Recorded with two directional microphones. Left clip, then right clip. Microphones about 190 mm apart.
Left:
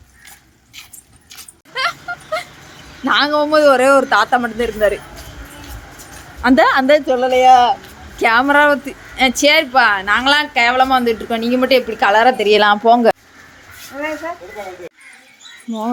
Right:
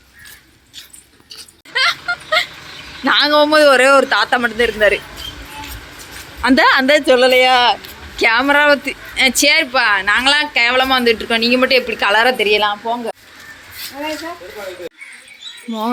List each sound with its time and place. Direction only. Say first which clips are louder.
1.7 s a sound: right 4 dB; 5° left (ahead or behind)
3.0 s a man's voice: right 2 dB; centre (ahead or behind)
6.4 s a man's voice: even; 5° left (ahead or behind)
7.0 s speech: right 2 dB; 10° right (ahead or behind)
8.2 s a woman's voice: left 1 dB; 15° left (ahead or behind)
12.5 s a woman's voice: left 3 dB; 40° left (ahead or behind)
12.7 s speech: left 10 dB; 65° left (ahead or behind)